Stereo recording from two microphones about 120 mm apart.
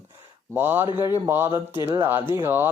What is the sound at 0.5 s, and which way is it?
Speech, 20° right (ahead or behind).